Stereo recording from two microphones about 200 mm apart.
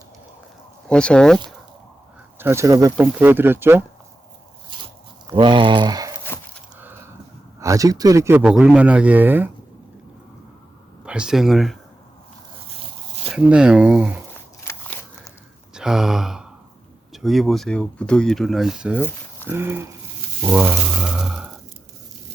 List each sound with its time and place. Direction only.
0.9 s speech: 5° left (ahead or behind)
2.4 s a man's voice: 15° right (ahead or behind)
5.3 s speech: 25° right (ahead or behind)
7.6 s a man's voice: 15° right (ahead or behind)
11.0 s speech: 5° right (ahead or behind)
13.3 s speech: 5° right (ahead or behind)
14.6 s crunch: 15° left (ahead or behind)
15.7 s sigh: 5° right (ahead or behind)
17.1 s a man's voice: centre (ahead or behind)
20.4 s a sound: 10° right (ahead or behind)